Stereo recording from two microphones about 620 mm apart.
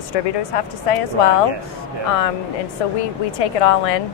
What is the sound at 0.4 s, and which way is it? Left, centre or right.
Speech, left.